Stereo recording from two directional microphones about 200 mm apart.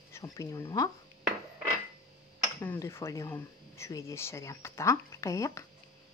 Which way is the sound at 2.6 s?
10° left (ahead or behind).